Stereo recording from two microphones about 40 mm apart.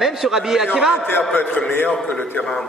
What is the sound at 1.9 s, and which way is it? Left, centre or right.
Speech, left.